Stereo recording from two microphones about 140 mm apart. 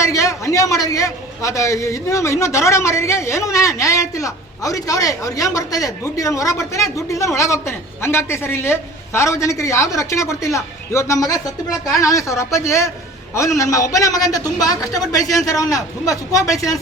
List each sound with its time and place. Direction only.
0.0 s a man's voice: 20° left (ahead or behind)